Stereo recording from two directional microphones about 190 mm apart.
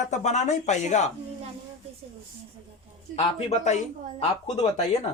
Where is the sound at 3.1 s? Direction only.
35° left (ahead or behind).